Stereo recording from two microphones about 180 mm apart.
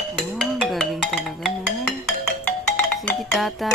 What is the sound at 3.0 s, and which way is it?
Music, 5° left (ahead or behind).